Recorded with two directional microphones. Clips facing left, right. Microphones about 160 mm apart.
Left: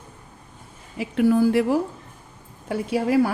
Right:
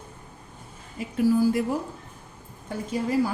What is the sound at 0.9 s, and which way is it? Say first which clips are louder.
A woman's voice: left 3 dB; 70° left (ahead or behind).